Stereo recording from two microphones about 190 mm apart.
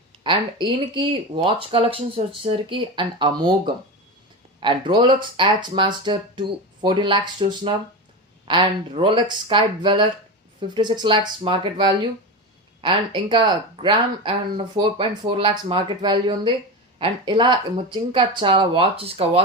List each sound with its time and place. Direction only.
0.2 s speech: 25° right (ahead or behind)
4.6 s speech: 25° right (ahead or behind)